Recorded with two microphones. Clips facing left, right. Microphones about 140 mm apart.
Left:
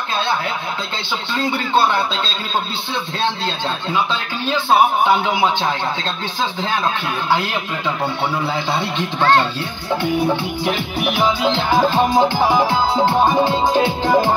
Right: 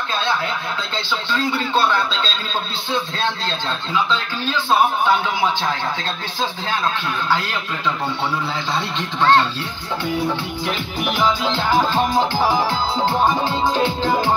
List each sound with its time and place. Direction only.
5.0 s music: 15° left (ahead or behind)
10.6 s music: 55° left (ahead or behind)
11.2 s music: 20° left (ahead or behind)